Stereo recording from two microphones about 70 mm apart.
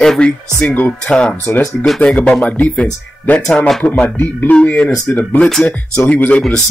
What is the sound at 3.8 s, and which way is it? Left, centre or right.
Speech, left.